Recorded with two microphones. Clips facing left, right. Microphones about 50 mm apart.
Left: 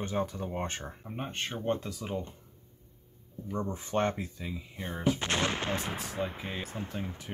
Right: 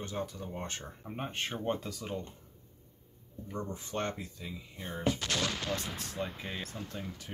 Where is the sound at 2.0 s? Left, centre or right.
Centre.